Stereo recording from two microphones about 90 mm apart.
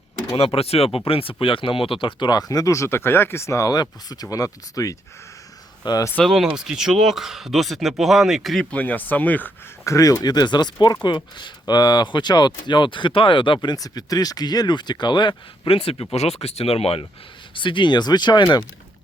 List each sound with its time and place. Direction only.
0.3 s speech: 90° left; by 6.1 s 50° left (ahead or behind)
6.2 s speech: 5° right (ahead or behind)
8.7 s speech: 20° left (ahead or behind)
9.8 s speech: 35° left (ahead or behind); by 17.1 s 90° left
17.5 s speech: 65° left (ahead or behind)